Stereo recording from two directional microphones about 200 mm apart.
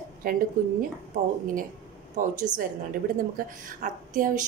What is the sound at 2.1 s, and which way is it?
A woman's voice, 40° right (ahead or behind).